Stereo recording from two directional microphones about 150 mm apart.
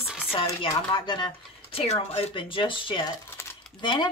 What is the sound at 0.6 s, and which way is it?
Speech, 30° left (ahead or behind).